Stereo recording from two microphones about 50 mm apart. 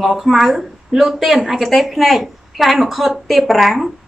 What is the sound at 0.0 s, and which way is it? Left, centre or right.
A woman's voice, centre.